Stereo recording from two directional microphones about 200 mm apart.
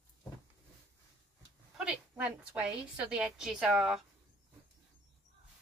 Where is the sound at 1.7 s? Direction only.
5° right (ahead or behind).